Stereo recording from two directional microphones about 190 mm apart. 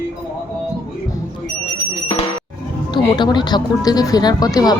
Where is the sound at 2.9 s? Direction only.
25° left (ahead or behind).